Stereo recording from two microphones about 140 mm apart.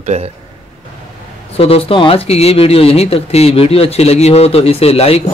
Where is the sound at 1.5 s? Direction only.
45° left (ahead or behind).